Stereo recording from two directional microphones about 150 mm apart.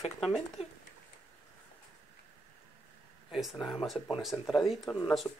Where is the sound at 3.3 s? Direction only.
Centre (ahead or behind).